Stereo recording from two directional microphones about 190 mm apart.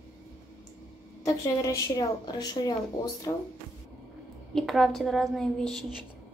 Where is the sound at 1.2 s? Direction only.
15° left (ahead or behind).